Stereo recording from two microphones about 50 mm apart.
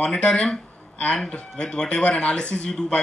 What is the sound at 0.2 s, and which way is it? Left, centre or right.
Speech, left.